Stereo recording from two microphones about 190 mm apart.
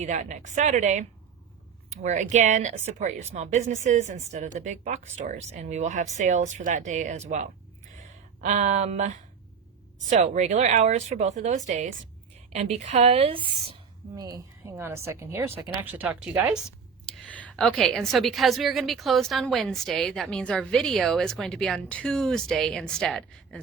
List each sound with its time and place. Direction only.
0.0 s speech: 40° right (ahead or behind); by 16.6 s 5° right (ahead or behind)
17.1 s a woman's voice: 5° left (ahead or behind)